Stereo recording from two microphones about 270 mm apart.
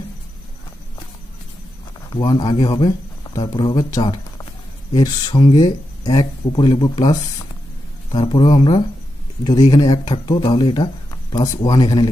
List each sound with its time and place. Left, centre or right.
2.0 s speech: centre